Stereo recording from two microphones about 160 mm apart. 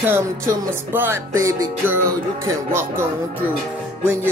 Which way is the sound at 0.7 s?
15° right (ahead or behind).